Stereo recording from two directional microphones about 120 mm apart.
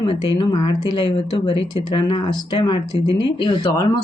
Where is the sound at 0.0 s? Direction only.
45° left (ahead or behind).